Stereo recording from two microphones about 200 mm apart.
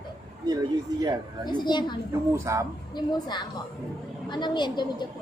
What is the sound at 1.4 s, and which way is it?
Speech, 20° left (ahead or behind).